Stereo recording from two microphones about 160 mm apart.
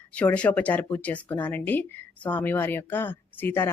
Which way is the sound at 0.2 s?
10° left (ahead or behind).